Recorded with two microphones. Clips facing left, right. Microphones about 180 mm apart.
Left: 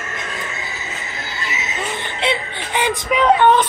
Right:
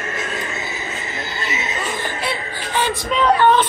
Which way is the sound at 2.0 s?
20° left (ahead or behind).